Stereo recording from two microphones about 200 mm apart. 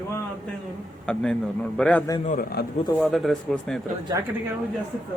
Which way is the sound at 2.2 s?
45° left (ahead or behind).